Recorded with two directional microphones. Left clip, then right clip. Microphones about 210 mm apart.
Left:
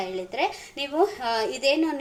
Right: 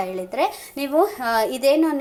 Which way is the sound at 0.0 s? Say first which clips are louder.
Right 4 dB; 20° right (ahead or behind).